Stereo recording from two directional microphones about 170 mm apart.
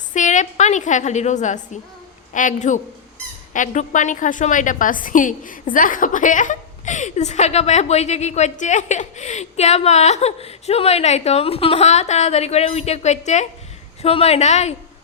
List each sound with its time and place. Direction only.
0.1 s a woman's voice: 45° left (ahead or behind)